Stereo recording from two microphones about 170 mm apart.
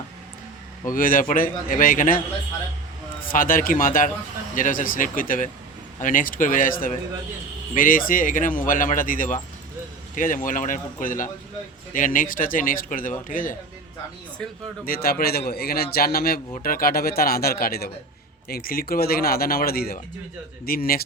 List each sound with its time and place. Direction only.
0.9 s a man's voice: 55° left (ahead or behind)
3.2 s speech: 55° left (ahead or behind)
14.8 s a man's voice: 60° left (ahead or behind)